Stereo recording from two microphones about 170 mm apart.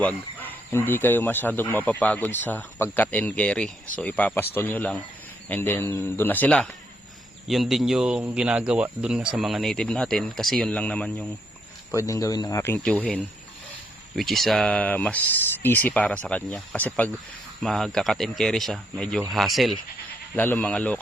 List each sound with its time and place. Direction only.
0.0 s speech: 10° left (ahead or behind)
11.9 s speech: 20° left (ahead or behind)
12.8 s speech: 5° left (ahead or behind)
20.3 s speech: 10° left (ahead or behind)